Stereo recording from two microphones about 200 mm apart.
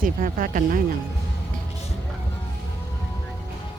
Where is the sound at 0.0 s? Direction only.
45° right (ahead or behind).